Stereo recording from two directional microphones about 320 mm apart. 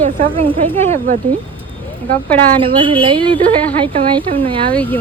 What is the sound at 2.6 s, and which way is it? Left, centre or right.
A woman's voice, centre.